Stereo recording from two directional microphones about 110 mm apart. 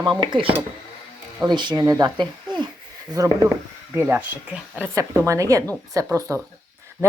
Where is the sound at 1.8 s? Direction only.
30° right (ahead or behind).